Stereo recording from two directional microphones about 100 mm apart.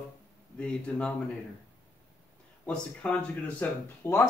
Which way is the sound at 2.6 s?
10° left (ahead or behind).